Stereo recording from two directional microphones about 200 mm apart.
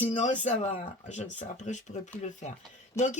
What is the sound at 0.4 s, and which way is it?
Speech, 35° left (ahead or behind).